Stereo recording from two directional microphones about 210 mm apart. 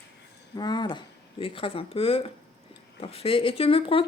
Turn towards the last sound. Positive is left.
turn(degrees=25)  # may be behind; listen again after turning